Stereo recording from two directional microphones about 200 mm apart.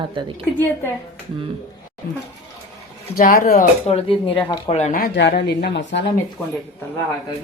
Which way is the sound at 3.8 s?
30° left (ahead or behind).